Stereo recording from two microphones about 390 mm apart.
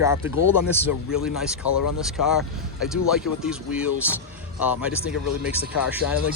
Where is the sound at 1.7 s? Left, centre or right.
Left.